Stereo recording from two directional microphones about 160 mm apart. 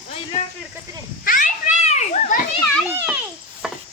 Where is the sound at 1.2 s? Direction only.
55° left (ahead or behind).